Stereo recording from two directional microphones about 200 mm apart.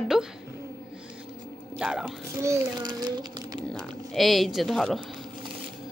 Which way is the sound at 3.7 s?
Centre (ahead or behind).